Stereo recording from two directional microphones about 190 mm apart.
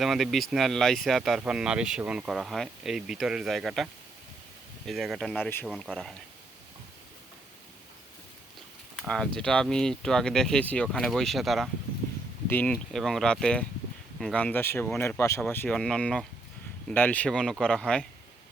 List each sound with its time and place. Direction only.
0.0 s speech: centre (ahead or behind)
4.9 s speech: centre (ahead or behind)
5.6 s speech: centre (ahead or behind)
9.0 s speech: 5° left (ahead or behind)